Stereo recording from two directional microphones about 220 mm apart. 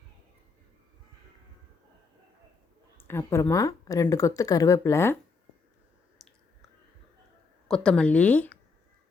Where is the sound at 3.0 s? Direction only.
10° left (ahead or behind).